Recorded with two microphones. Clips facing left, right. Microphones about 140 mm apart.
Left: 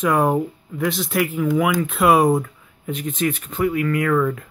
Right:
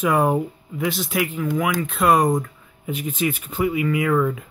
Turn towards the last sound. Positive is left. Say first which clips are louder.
# left 1 dB
turn(degrees=-5)  # may be behind; listen again after turning